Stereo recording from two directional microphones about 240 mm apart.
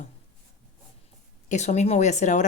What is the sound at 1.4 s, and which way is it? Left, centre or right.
Speech, left.